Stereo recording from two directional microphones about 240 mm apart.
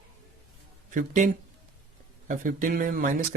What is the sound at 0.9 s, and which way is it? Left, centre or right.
Speech, right.